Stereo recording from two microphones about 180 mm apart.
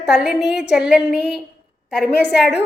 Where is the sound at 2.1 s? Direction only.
65° left (ahead or behind).